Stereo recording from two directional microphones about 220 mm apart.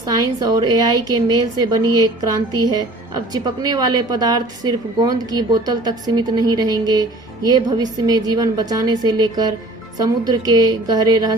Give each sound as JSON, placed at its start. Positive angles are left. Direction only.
{"t": 0.4, "sound": "a woman's voice", "side_deg": -20}